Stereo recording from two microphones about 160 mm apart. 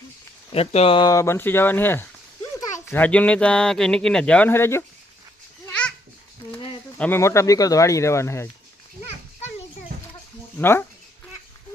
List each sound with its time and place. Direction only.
0.5 s speech: 40° left (ahead or behind); by 4.8 s 15° left (ahead or behind)
5.6 s babbling: 10° left (ahead or behind)
7.0 s speech: 15° left (ahead or behind)
10.6 s speech: 15° left (ahead or behind)